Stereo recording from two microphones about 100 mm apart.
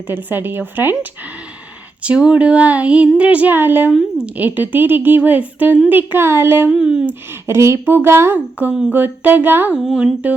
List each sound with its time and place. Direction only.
0.1 s speech: 20° right (ahead or behind)
2.0 s speech: 10° right (ahead or behind)
6.7 s speech: 10° right (ahead or behind)
7.1 s speech: 25° right (ahead or behind); by 10.3 s 10° right (ahead or behind)